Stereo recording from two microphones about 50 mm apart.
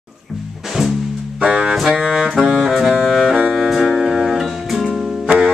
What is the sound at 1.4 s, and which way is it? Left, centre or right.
Music, centre.